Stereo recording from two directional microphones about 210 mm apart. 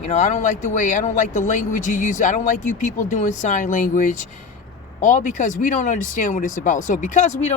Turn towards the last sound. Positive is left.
turn(degrees=35)  # may be behind; listen again after turning